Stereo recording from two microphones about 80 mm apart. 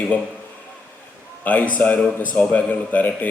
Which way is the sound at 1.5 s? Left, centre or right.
Centre.